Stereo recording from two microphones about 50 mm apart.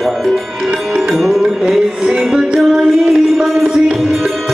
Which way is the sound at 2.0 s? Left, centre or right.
Centre.